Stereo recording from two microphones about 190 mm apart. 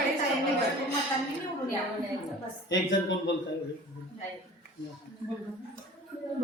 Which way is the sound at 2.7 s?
70° left (ahead or behind).